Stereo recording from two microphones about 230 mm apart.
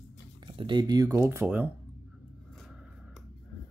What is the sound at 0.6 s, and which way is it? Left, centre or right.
Speech, centre.